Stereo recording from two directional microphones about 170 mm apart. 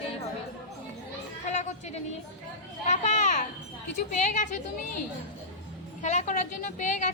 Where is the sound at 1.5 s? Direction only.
45° left (ahead or behind).